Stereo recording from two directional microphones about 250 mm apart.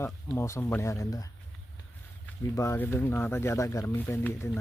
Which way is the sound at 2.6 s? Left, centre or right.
Centre.